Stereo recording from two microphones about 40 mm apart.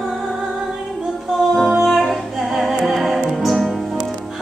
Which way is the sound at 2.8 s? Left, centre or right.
Centre.